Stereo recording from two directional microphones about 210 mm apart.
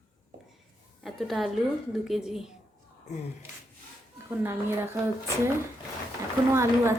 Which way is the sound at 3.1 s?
35° left (ahead or behind).